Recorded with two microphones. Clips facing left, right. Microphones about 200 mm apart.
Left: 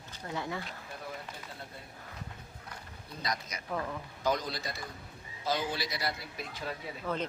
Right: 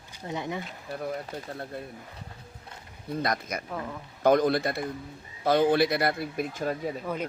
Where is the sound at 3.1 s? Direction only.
55° right (ahead or behind).